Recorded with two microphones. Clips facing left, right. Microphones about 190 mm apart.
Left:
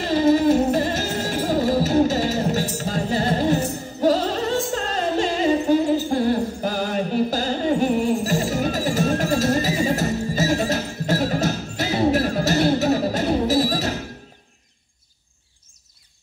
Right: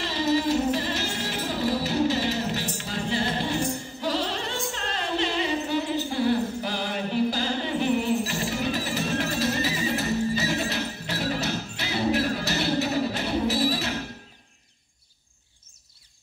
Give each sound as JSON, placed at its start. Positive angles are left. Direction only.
{"t": 0.0, "sound": "music", "side_deg": 50}